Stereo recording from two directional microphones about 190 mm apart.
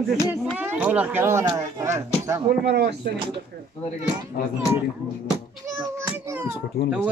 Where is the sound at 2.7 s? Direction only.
60° right (ahead or behind).